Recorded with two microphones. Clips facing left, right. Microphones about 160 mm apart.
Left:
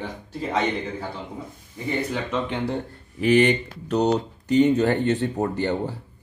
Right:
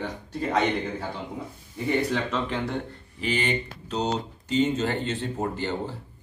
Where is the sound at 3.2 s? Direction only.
65° left (ahead or behind).